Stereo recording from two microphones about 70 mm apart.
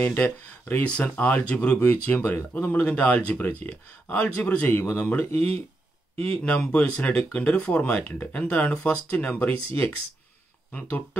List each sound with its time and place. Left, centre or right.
0.0 s speech: left